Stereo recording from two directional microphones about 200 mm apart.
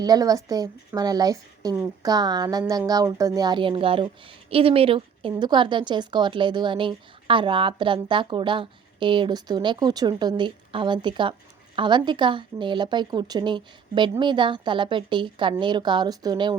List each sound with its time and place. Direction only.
0.0 s a woman's voice: 20° right (ahead or behind)